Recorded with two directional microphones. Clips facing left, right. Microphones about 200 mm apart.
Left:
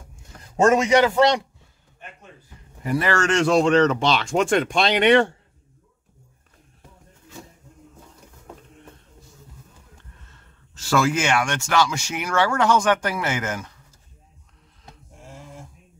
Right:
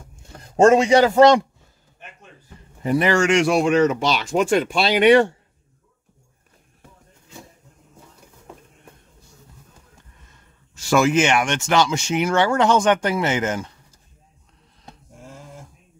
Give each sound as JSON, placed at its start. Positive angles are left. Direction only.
{"t": 0.6, "sound": "a man's voice", "side_deg": -30}
{"t": 2.8, "sound": "speech", "side_deg": -20}
{"t": 10.3, "sound": "speech", "side_deg": -15}